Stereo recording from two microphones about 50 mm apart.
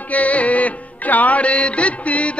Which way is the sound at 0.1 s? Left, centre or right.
Left.